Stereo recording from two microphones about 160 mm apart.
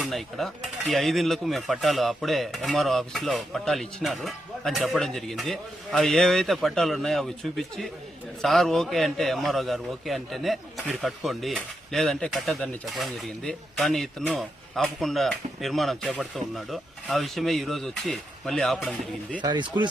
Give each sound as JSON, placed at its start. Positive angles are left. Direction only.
{"t": 0.0, "sound": "a man's voice", "side_deg": 0}
{"t": 19.4, "sound": "speech", "side_deg": -30}